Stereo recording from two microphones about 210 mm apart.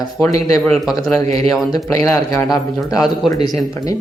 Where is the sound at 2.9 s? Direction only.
Centre (ahead or behind).